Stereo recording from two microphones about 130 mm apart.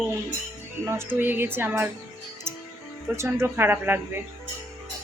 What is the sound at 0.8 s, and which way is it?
Music, 20° right (ahead or behind).